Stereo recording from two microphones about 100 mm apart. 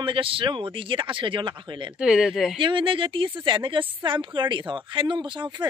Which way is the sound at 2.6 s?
55° right (ahead or behind).